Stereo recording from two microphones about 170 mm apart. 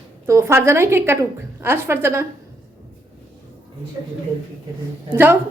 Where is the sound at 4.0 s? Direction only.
20° right (ahead or behind).